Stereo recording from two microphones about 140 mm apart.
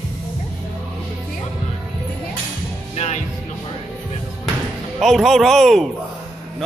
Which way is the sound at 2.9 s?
55° left (ahead or behind).